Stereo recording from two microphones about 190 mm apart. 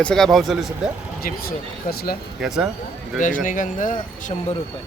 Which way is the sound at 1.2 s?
55° left (ahead or behind).